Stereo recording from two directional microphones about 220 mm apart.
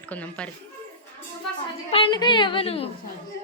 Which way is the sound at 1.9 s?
25° left (ahead or behind).